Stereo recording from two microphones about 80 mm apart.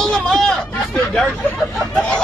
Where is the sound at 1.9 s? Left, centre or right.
Centre.